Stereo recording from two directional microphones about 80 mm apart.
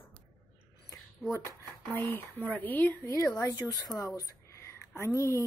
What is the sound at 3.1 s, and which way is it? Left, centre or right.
Speech, left.